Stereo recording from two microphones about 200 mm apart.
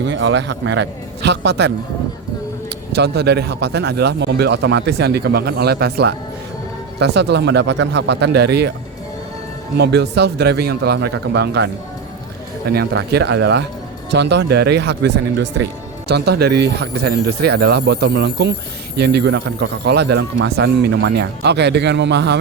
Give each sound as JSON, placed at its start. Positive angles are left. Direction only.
{"t": 0.0, "sound": "speech", "side_deg": -65}
{"t": 2.9, "sound": "speech", "side_deg": -55}
{"t": 9.7, "sound": "speech", "side_deg": -55}